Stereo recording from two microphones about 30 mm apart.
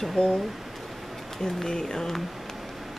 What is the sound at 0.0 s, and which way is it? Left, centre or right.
Speech, centre.